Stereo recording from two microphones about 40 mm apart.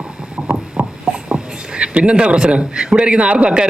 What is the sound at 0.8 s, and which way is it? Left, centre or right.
Heart murmur, right.